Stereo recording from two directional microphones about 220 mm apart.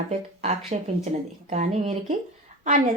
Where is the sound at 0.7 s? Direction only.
30° right (ahead or behind).